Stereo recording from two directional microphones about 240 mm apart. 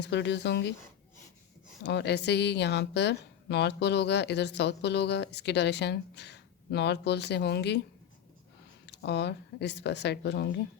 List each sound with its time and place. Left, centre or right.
0.0 s a woman's voice: left
1.8 s a woman's voice: left
8.9 s a woman's voice: left